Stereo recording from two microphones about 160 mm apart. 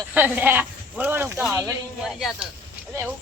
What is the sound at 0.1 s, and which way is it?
Speech, 10° right (ahead or behind).